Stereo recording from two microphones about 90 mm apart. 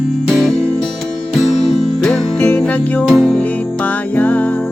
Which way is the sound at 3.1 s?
5° left (ahead or behind).